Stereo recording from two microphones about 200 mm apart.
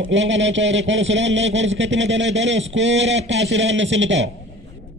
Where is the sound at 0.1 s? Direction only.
65° right (ahead or behind).